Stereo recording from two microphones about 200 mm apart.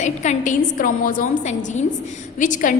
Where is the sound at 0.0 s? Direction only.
35° left (ahead or behind).